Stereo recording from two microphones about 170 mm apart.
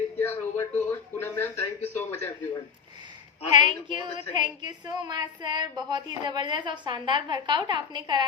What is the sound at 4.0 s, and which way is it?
A woman's voice, 25° right (ahead or behind).